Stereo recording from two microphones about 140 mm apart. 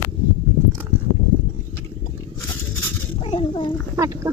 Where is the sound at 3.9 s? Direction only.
25° right (ahead or behind).